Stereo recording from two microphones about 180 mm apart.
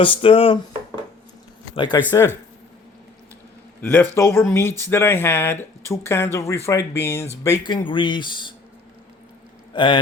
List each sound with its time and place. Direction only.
0.0 s speech: 30° left (ahead or behind)
1.7 s speech: 25° left (ahead or behind)
3.8 s speech: 10° left (ahead or behind); by 8.5 s 25° left (ahead or behind)
9.7 s speech: 25° left (ahead or behind)